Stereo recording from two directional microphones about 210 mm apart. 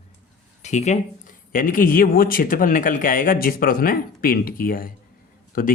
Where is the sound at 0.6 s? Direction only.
35° left (ahead or behind).